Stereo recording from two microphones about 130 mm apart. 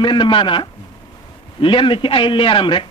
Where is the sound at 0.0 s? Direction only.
40° left (ahead or behind).